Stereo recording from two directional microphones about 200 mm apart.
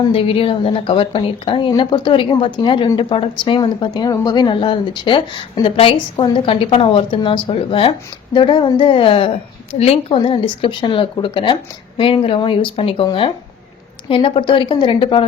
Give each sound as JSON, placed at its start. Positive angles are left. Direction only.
{"t": 0.1, "sound": "speech", "side_deg": 25}